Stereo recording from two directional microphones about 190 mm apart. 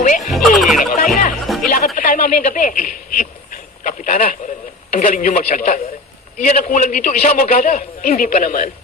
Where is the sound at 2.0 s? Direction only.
45° left (ahead or behind).